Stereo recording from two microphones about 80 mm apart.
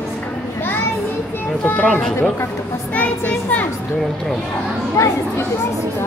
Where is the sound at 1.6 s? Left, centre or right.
Left.